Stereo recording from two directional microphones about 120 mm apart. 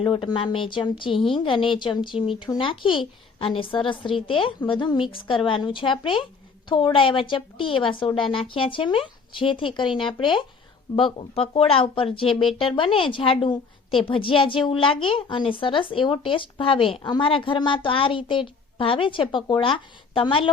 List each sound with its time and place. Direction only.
0.0 s a woman's voice: 45° left (ahead or behind)